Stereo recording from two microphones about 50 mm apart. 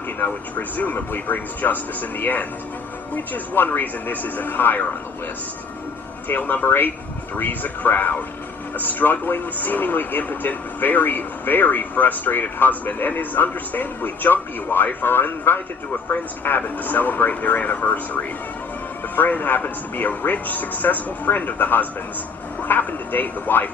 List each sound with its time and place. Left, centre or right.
0.2 s speech: left
3.5 s speech: left
6.2 s a man's voice: left